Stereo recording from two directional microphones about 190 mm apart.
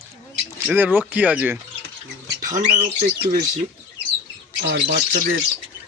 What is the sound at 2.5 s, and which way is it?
Speech, 40° right (ahead or behind).